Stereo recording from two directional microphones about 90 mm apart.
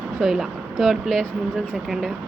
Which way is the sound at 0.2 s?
Centre (ahead or behind).